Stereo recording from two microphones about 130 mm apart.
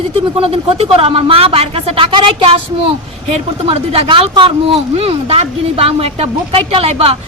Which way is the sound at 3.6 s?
45° right (ahead or behind).